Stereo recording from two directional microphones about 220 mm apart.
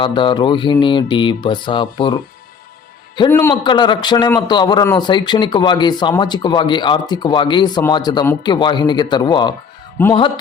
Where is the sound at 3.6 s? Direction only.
20° left (ahead or behind).